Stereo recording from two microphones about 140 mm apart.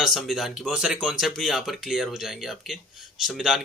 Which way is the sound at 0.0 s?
Centre (ahead or behind).